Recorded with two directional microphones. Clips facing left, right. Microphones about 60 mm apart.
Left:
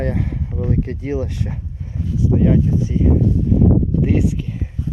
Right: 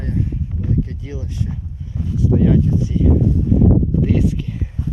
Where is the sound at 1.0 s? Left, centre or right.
Left.